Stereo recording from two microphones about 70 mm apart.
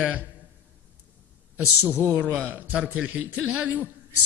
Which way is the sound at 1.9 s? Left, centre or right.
Left.